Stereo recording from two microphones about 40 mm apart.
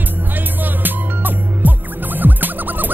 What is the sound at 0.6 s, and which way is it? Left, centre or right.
Music, right.